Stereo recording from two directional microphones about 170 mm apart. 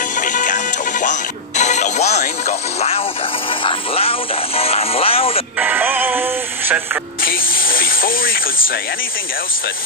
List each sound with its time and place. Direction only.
0.2 s music: 50° left (ahead or behind)
5.6 s music: 10° right (ahead or behind)
7.2 s speech: 60° left (ahead or behind)